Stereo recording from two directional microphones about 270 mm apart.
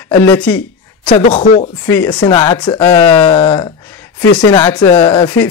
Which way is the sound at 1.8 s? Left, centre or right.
Centre.